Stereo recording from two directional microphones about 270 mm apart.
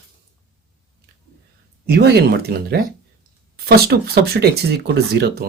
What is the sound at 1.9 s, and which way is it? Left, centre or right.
Speech, right.